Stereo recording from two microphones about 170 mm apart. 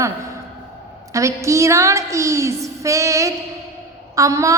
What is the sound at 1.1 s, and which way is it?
A woman's voice, 20° right (ahead or behind).